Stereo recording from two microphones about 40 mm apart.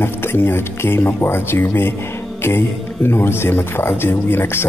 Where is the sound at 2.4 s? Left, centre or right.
Left.